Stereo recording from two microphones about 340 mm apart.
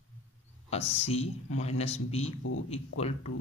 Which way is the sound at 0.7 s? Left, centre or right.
Centre.